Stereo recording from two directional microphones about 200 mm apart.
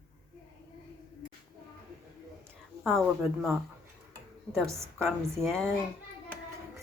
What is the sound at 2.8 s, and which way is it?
Speech, centre (ahead or behind).